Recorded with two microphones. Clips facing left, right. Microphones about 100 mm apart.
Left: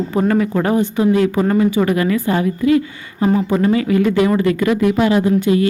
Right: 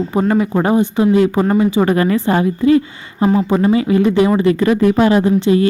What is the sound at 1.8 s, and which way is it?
A woman's voice, 35° right (ahead or behind).